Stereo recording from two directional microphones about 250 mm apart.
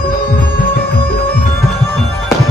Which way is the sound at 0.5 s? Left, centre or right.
Left.